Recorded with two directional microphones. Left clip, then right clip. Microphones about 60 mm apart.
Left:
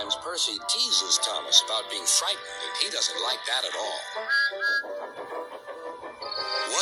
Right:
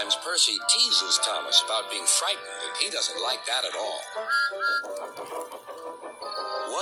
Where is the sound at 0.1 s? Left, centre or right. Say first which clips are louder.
Right 5 dB; right.